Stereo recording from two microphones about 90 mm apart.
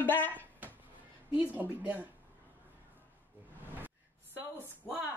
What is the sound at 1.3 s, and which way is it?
Speech, 15° right (ahead or behind).